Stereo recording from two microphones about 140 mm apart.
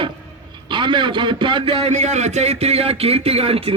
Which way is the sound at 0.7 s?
35° right (ahead or behind).